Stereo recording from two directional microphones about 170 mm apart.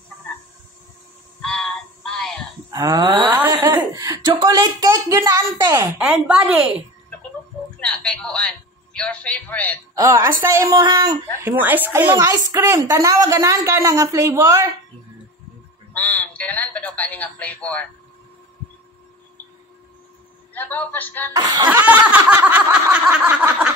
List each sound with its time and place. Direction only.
1.4 s synthetic singing: 5° left (ahead or behind)
2.7 s speech: 20° right (ahead or behind)
3.3 s a sound: 10° right (ahead or behind)
3.6 s speech: 20° right (ahead or behind)
5.9 s a woman's voice: 5° right (ahead or behind)
7.8 s a man's voice: 5° left (ahead or behind)
9.9 s a woman's voice: 15° right (ahead or behind)
11.4 s a woman's voice: 10° right (ahead or behind)
15.9 s telephone: 10° left (ahead or behind)
20.5 s a man's voice: 10° left (ahead or behind)
21.3 s speech: 20° right (ahead or behind)
21.6 s snicker: 10° right (ahead or behind)